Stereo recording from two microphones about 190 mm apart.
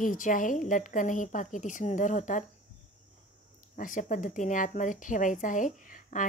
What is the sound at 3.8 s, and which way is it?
A woman's voice, 45° left (ahead or behind).